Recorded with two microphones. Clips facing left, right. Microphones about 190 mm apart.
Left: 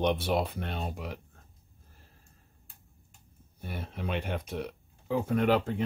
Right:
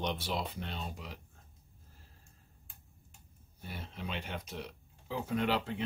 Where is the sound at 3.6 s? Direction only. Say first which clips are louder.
Left 6 dB; 60° left (ahead or behind).